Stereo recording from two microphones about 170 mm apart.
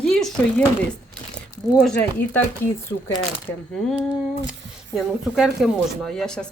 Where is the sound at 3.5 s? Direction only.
20° left (ahead or behind).